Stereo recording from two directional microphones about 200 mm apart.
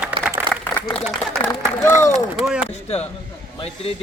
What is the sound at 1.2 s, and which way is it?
Speech, 5° left (ahead or behind).